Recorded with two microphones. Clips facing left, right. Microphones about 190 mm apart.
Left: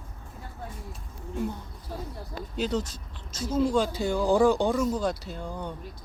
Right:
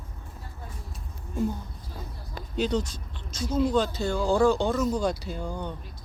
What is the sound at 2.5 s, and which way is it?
Speech, 5° left (ahead or behind).